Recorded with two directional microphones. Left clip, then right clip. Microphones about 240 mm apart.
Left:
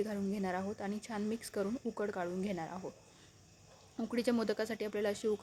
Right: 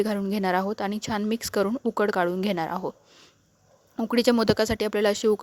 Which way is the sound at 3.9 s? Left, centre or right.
Right.